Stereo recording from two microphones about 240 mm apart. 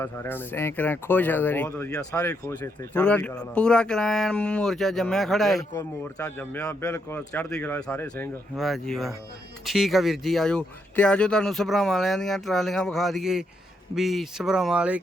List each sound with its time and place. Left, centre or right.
0.0 s speech: centre